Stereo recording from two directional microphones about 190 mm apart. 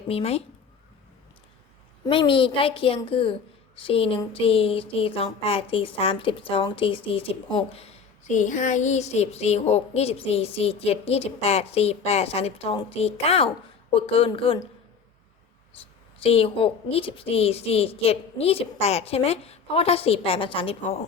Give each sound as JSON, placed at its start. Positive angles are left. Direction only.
{"t": 0.1, "sound": "speech", "side_deg": 30}
{"t": 2.0, "sound": "a woman's voice", "side_deg": 25}
{"t": 8.3, "sound": "a woman's voice", "side_deg": 40}
{"t": 15.8, "sound": "speech", "side_deg": 30}